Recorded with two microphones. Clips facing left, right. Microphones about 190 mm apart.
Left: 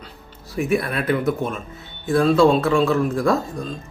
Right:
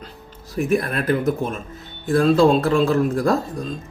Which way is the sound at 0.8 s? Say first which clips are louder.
Right 1 dB; 40° right (ahead or behind).